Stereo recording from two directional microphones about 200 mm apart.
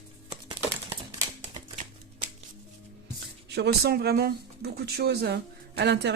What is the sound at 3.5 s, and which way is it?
Speech, 55° right (ahead or behind).